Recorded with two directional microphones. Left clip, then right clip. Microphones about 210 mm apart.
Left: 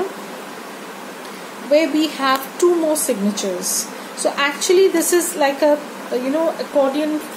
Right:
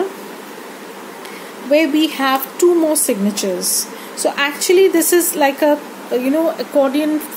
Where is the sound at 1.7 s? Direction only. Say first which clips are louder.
Right 2 dB; 35° right (ahead or behind).